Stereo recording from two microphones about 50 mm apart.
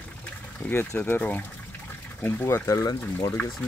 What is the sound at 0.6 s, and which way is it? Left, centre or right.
Speech, left.